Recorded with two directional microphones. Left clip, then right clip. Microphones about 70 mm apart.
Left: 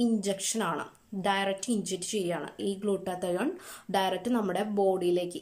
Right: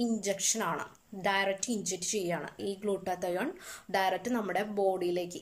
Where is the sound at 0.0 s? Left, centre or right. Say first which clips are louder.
Left 2 dB; left.